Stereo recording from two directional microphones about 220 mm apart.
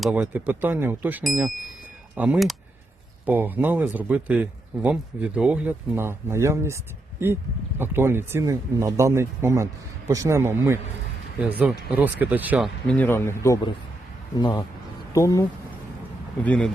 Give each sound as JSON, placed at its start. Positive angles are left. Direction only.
{"t": 0.0, "sound": "a man's voice", "side_deg": -5}
{"t": 7.8, "sound": "a man's voice", "side_deg": -10}